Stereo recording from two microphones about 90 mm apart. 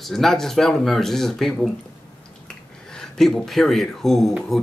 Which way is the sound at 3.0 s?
5° left (ahead or behind).